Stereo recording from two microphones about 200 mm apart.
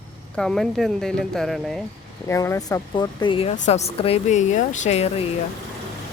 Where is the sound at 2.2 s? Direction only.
15° left (ahead or behind); by 5.2 s 30° left (ahead or behind).